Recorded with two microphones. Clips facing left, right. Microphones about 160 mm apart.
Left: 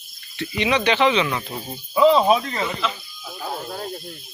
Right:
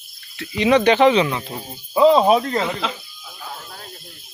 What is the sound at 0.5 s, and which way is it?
Speech, 45° right (ahead or behind).